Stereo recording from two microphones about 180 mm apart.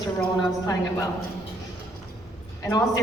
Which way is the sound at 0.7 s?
20° left (ahead or behind).